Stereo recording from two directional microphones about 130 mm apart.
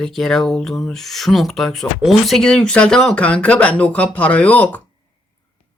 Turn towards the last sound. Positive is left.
turn(degrees=10)  # may be behind; listen again after turning